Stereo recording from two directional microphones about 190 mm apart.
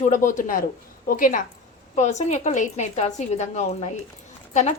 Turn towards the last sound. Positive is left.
turn(degrees=40)  # may be behind; listen again after turning